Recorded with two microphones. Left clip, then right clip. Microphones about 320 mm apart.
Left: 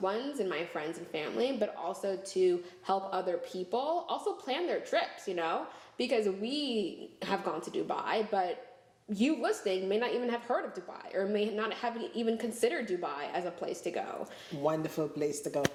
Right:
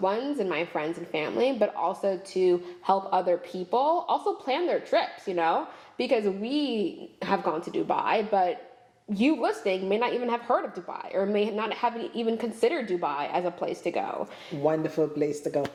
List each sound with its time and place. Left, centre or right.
0.0 s a woman's voice: right
14.6 s speech: centre